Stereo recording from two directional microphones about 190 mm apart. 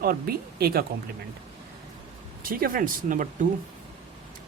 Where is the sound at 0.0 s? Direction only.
50° right (ahead or behind).